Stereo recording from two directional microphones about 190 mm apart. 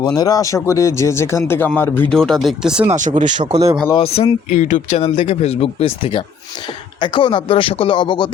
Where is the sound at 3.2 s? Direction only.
40° right (ahead or behind).